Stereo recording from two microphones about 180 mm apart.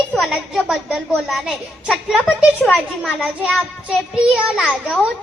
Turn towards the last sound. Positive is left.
turn(degrees=-5)  # may be behind; listen again after turning